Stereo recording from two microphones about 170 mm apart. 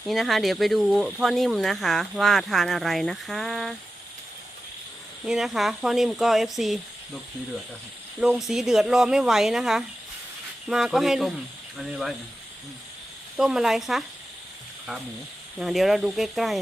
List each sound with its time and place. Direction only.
0.0 s speech: centre (ahead or behind)
5.2 s speech: centre (ahead or behind)
8.2 s speech: centre (ahead or behind)
13.3 s speech: 5° right (ahead or behind)
15.5 s speech: centre (ahead or behind)